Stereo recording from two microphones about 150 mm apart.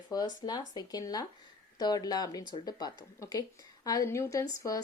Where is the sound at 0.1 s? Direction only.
25° left (ahead or behind).